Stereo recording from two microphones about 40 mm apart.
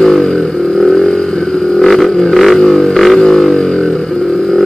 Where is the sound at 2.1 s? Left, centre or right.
Centre.